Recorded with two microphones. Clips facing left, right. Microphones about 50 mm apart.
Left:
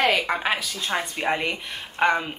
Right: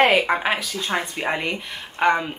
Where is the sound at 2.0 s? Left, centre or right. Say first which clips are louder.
Right 2 dB; centre.